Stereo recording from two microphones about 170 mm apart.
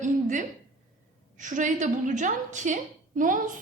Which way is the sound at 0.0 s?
50° right (ahead or behind).